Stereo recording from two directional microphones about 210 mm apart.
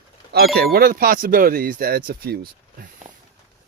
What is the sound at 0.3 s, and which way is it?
Speech, 45° right (ahead or behind).